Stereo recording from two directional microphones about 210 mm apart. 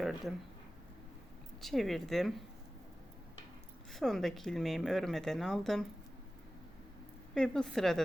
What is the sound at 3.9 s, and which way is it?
Speech, centre (ahead or behind).